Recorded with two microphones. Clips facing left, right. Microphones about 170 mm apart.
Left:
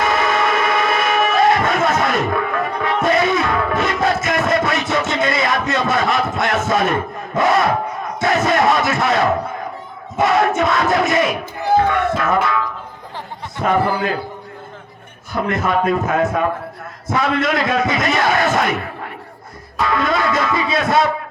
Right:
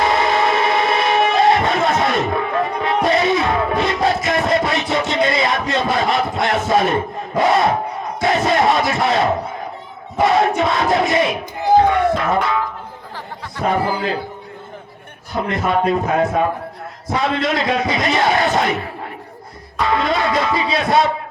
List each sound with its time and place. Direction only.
0.0 s vehicle: 25° right (ahead or behind)
3.1 s music: 25° right (ahead or behind)
5.7 s a sound: 25° right (ahead or behind)
6.7 s speech: 20° right (ahead or behind)
13.7 s speech: 25° right (ahead or behind)
15.4 s speech: 20° right (ahead or behind)
19.9 s speech: 25° right (ahead or behind)